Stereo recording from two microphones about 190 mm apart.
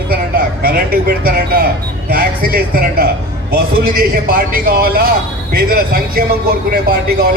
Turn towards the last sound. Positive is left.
turn(degrees=-50)  # may be behind; listen again after turning